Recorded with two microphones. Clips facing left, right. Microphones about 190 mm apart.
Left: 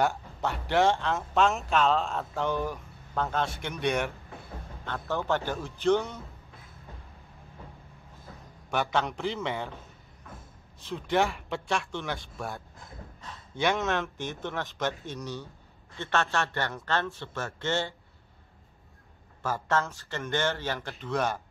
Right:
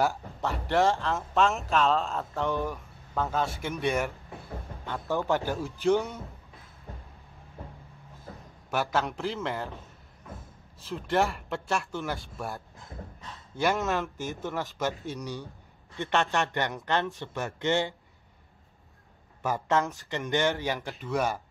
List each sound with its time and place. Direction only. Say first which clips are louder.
0.0 s speech: even; centre (ahead or behind)
4.8 s a man's voice: right 2 dB; 10° right (ahead or behind)
8.6 s speech: even; 5° right (ahead or behind)
10.8 s a man's voice: even; centre (ahead or behind)
19.4 s a man's voice: right 2 dB; 15° right (ahead or behind)